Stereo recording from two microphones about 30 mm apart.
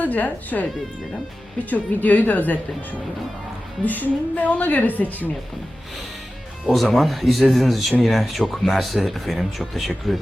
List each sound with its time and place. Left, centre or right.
0.0 s a woman's voice: left
1.7 s a woman's voice: left
3.8 s a woman's voice: left
6.9 s speech: centre